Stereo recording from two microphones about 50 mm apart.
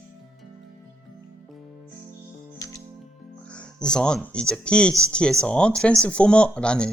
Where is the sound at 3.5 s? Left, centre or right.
Centre.